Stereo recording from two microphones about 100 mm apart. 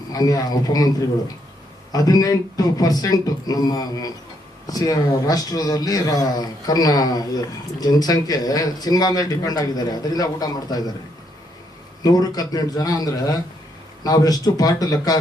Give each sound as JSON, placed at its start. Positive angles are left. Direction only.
{"t": 0.1, "sound": "speech", "side_deg": 40}
{"t": 1.9, "sound": "speech", "side_deg": 40}
{"t": 12.0, "sound": "speech", "side_deg": 40}